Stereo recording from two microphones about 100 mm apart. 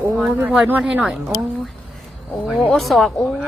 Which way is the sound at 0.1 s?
5° right (ahead or behind).